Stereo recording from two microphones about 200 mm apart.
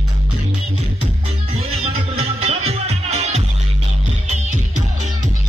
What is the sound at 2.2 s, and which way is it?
Music, 30° right (ahead or behind).